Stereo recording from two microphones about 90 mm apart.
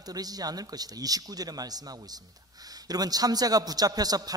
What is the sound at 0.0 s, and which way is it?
Speech, 45° right (ahead or behind).